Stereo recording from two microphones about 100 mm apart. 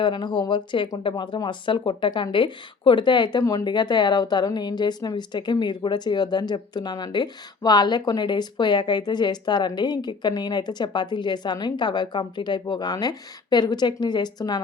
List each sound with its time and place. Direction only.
0.0 s speech: 50° left (ahead or behind)